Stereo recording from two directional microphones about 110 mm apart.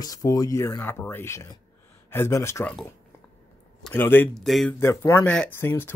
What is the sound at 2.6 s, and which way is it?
Speech, 10° left (ahead or behind).